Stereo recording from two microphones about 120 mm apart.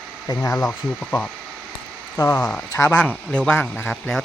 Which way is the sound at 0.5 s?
15° left (ahead or behind).